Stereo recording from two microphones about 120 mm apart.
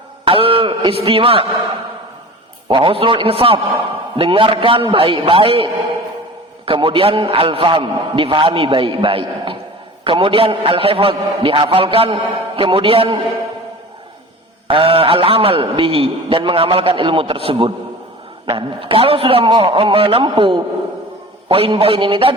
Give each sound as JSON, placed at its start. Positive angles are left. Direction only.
{"t": 0.3, "sound": "a man's voice", "side_deg": -50}
{"t": 2.6, "sound": "a man's voice", "side_deg": -45}
{"t": 6.7, "sound": "a man's voice", "side_deg": -50}
{"t": 14.7, "sound": "a man's voice", "side_deg": -50}